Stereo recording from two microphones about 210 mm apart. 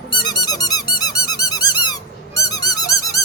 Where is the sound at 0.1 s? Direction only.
20° left (ahead or behind).